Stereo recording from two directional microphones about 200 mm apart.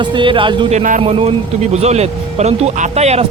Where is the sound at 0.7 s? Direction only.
40° right (ahead or behind).